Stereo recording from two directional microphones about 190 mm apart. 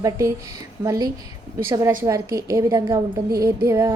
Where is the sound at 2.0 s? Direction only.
15° right (ahead or behind).